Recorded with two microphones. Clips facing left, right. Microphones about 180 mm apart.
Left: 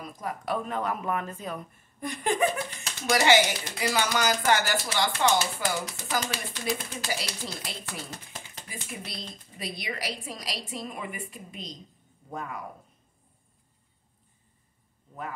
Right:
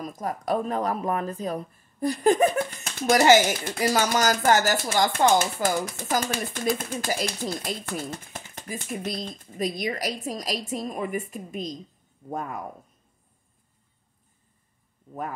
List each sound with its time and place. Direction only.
0.0 s speech: 45° right (ahead or behind)